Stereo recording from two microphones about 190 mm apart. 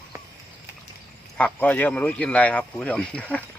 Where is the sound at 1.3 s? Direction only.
10° left (ahead or behind).